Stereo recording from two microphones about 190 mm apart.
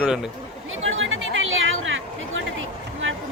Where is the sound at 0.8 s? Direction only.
90° right.